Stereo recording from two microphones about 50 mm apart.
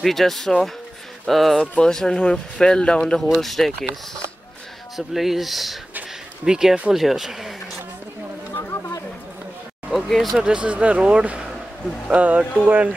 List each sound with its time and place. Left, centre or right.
0.0 s speech: centre
1.8 s speech: centre
4.9 s speech: centre
6.4 s speech: centre
8.5 s a sound: left
10.0 s speech: centre
10.4 s speech: right